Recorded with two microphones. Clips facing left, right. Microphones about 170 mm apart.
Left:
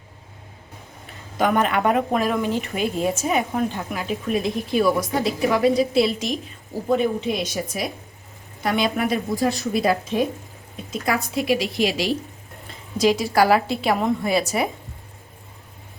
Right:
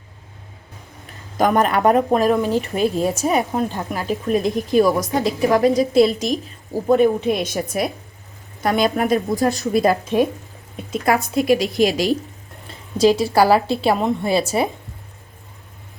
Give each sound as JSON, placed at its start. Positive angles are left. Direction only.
{"t": 1.4, "sound": "a woman's voice", "side_deg": -40}
{"t": 6.8, "sound": "a woman's voice", "side_deg": -50}
{"t": 8.6, "sound": "a woman's voice", "side_deg": -45}
{"t": 13.0, "sound": "a woman's voice", "side_deg": -30}